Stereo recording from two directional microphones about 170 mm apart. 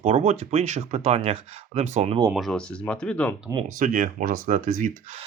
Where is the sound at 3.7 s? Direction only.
50° right (ahead or behind).